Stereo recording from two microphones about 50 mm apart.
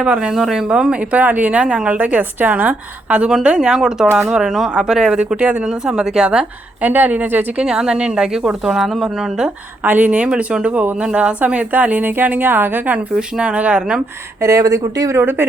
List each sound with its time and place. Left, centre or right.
0.7 s speech: centre
1.1 s a woman's voice: right
3.2 s speech: centre
5.4 s a woman's voice: right
5.6 s speech: centre
6.8 s a woman's voice: right
7.5 s speech: centre
8.8 s speech: centre
9.8 s a woman's voice: right
11.3 s a woman's voice: right
13.1 s a woman's voice: centre
14.4 s speech: right
15.2 s speech: right